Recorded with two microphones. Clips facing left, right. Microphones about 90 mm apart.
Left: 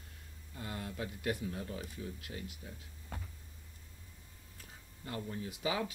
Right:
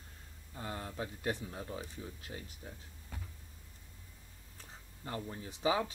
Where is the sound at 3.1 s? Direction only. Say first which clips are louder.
Left 3 dB; 50° left (ahead or behind).